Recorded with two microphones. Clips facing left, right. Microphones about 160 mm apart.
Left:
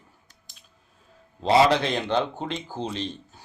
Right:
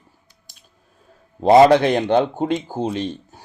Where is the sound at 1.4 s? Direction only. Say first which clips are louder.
Right 8 dB; 50° right (ahead or behind).